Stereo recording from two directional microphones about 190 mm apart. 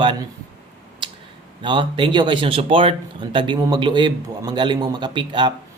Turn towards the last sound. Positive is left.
turn(degrees=-25)  # may be behind; listen again after turning